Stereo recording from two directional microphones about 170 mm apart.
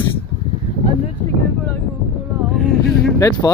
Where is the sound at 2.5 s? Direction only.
Centre (ahead or behind).